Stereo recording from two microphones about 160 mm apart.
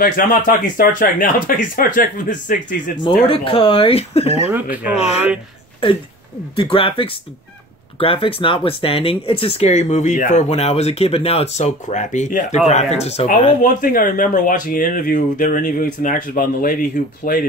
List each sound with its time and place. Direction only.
0.0 s speech: 60° left (ahead or behind)
3.0 s speech: 35° left (ahead or behind)
4.5 s speech: 10° right (ahead or behind)
4.9 s speech: 40° left (ahead or behind)
6.5 s speech: 35° left (ahead or behind)
13.6 s speech: 55° left (ahead or behind)